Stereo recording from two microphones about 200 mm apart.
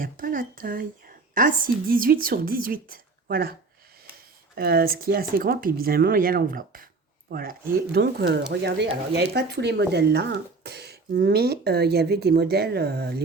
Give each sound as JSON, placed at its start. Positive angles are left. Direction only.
{"t": 0.0, "sound": "speech", "side_deg": -45}
{"t": 4.5, "sound": "speech", "side_deg": -50}